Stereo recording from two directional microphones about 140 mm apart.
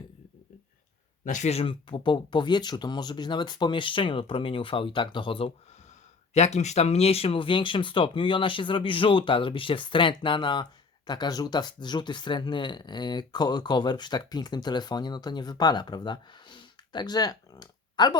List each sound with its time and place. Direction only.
1.2 s speech: 60° left (ahead or behind); by 5.5 s 35° left (ahead or behind)
6.3 s speech: 55° left (ahead or behind); by 18.2 s 30° left (ahead or behind)